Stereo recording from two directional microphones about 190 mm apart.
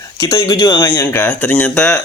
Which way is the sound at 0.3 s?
25° left (ahead or behind).